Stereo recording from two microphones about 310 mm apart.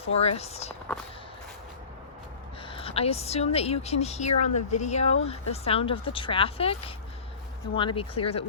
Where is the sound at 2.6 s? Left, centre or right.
Centre.